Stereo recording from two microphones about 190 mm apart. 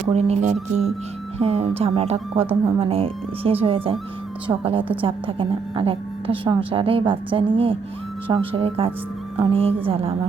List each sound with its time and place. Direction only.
0.1 s a woman's voice: 35° right (ahead or behind)